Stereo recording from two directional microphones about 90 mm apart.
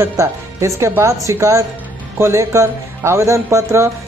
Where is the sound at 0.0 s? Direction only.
35° right (ahead or behind).